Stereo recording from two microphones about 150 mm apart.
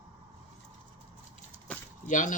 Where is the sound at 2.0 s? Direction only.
60° left (ahead or behind).